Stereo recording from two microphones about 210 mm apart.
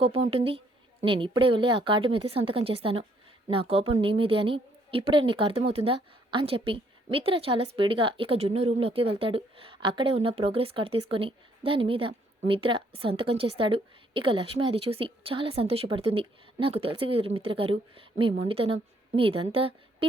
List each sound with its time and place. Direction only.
0.0 s a woman's voice: 30° right (ahead or behind)